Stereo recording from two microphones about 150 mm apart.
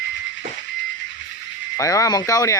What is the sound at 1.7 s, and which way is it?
Speech, 20° left (ahead or behind).